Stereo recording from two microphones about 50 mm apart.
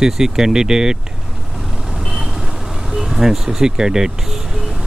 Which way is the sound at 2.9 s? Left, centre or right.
Centre.